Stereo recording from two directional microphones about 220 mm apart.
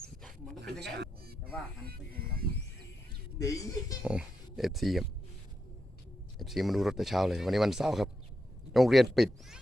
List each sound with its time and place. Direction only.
0.8 s a sound: 50° right (ahead or behind)
3.3 s speech: 15° left (ahead or behind)
4.0 s speech: 5° right (ahead or behind)
6.4 s speech: centre (ahead or behind)